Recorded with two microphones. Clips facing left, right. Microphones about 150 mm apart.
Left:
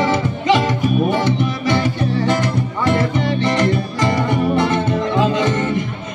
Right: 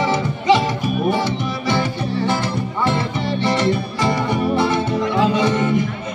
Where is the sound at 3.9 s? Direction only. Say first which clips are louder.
Left 2 dB; 20° left (ahead or behind).